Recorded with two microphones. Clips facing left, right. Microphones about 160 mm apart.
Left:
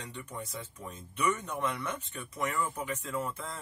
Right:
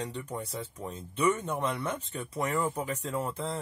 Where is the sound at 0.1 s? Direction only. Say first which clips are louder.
Right 5 dB; 35° right (ahead or behind).